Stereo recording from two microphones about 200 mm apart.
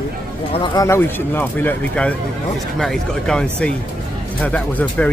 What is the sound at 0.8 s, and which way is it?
Speech, 10° left (ahead or behind).